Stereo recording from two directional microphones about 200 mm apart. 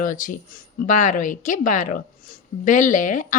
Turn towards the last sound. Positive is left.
turn(degrees=40)  # may be behind; listen again after turning